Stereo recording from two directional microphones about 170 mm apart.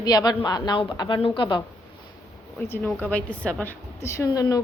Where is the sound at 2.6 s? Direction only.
15° left (ahead or behind).